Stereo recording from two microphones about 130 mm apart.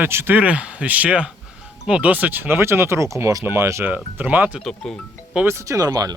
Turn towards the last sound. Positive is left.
turn(degrees=-30)  # may be behind; listen again after turning